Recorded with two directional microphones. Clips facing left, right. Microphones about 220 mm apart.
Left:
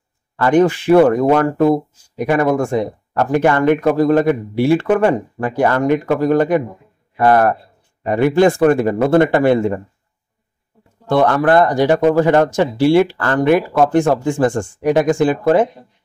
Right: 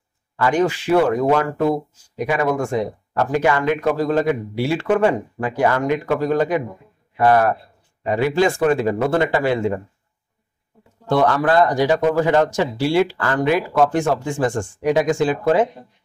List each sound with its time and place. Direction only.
0.5 s speech: 55° left (ahead or behind)
11.2 s speech: 55° left (ahead or behind)